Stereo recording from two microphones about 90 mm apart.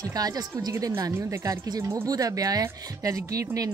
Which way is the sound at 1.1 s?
35° right (ahead or behind).